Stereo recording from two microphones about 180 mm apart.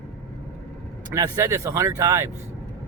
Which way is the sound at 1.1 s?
20° right (ahead or behind).